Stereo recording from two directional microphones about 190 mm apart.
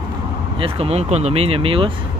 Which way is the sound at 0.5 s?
30° right (ahead or behind).